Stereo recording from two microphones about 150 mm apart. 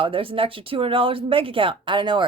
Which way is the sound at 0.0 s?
35° right (ahead or behind).